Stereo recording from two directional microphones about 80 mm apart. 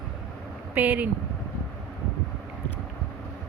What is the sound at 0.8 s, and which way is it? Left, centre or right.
Speech, centre.